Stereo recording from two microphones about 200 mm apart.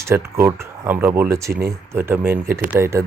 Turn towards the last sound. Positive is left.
turn(degrees=-15)  # may be behind; listen again after turning